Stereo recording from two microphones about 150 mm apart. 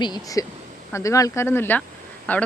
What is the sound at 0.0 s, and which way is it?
Speech, 25° left (ahead or behind).